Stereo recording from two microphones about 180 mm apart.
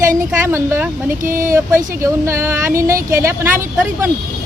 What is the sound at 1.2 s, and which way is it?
Speech, 50° right (ahead or behind).